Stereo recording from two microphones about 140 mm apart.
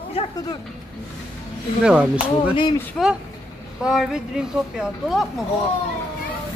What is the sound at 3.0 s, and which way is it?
Speech, 10° left (ahead or behind).